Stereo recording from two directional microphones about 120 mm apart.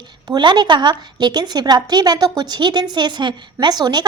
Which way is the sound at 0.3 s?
40° right (ahead or behind).